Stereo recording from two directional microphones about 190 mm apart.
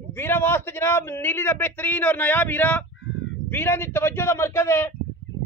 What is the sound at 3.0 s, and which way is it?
Fowl, 80° left.